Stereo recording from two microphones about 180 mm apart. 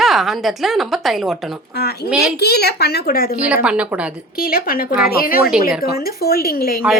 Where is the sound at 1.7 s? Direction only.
60° left (ahead or behind).